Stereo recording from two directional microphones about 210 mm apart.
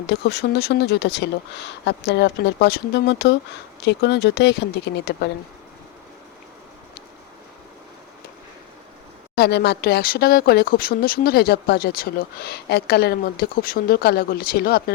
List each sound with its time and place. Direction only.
0.1 s speech: 50° left (ahead or behind)
9.3 s speech: 50° left (ahead or behind)